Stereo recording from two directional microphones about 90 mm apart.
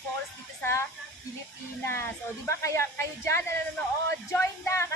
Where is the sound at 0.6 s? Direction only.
30° left (ahead or behind).